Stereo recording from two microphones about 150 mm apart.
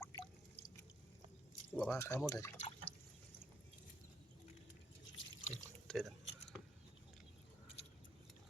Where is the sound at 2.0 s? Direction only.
20° left (ahead or behind).